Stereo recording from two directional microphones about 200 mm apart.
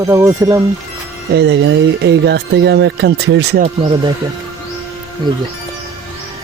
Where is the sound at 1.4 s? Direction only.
60° right (ahead or behind).